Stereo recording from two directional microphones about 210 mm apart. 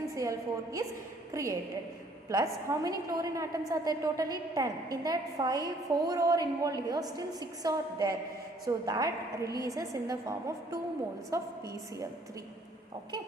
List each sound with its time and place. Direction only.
0.0 s a woman's voice: 15° right (ahead or behind)